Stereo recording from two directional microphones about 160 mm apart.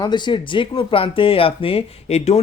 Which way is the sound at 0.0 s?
30° left (ahead or behind).